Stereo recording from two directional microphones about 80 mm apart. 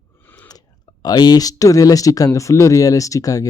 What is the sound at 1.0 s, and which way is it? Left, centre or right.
Speech, left.